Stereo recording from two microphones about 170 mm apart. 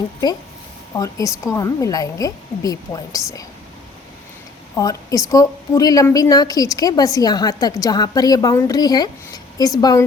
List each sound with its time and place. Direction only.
0.9 s a woman's voice: 20° left (ahead or behind)
4.8 s a woman's voice: 20° left (ahead or behind)